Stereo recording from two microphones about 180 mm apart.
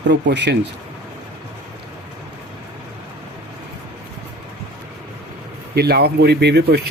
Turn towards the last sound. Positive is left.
turn(degrees=-65)  # may be behind; listen again after turning